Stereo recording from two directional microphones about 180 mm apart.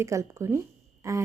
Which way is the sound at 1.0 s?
15° right (ahead or behind).